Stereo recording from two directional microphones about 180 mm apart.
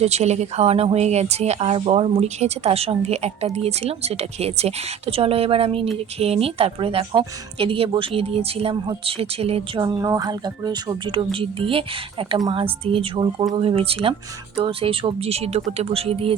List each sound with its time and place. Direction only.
0.0 s speech: 35° right (ahead or behind)